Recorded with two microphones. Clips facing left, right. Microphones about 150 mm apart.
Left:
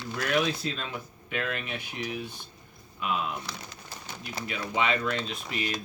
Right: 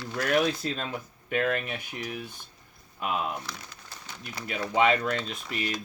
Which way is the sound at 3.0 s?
45° right (ahead or behind).